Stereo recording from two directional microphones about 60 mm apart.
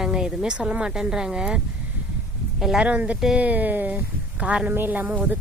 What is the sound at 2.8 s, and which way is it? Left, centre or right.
Speech, right.